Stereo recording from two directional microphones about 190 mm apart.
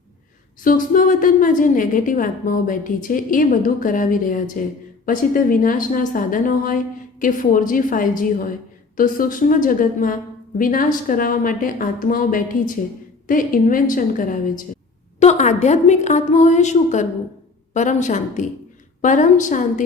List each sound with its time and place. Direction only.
0.6 s a woman's voice: 45° left (ahead or behind)